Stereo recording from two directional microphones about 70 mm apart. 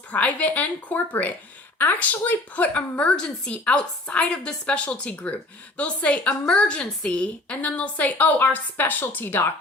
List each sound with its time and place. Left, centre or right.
0.1 s a woman's voice: centre